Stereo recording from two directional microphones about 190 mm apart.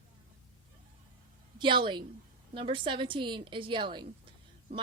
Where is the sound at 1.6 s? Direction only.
25° right (ahead or behind).